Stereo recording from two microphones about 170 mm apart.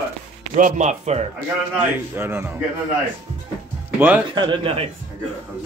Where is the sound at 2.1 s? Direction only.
10° right (ahead or behind).